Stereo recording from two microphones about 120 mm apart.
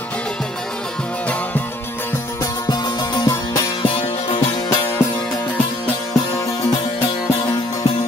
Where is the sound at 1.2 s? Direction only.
10° left (ahead or behind).